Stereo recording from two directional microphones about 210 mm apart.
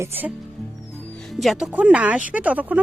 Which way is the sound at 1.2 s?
Centre (ahead or behind).